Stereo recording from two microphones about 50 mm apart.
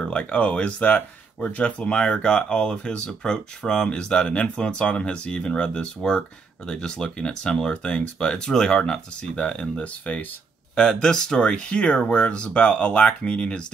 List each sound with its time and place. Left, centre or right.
0.0 s speech: left
10.8 s speech: centre